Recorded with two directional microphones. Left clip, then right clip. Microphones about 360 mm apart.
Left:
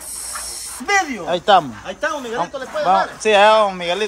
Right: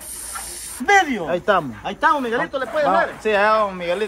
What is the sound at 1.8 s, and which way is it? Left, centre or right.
Speech, right.